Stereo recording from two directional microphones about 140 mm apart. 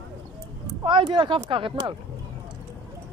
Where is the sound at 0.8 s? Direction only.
35° right (ahead or behind).